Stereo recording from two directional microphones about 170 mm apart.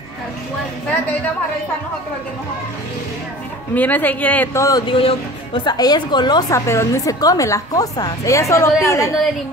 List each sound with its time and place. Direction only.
3.7 s speech: 10° left (ahead or behind)
4.6 s a woman's voice: 25° left (ahead or behind)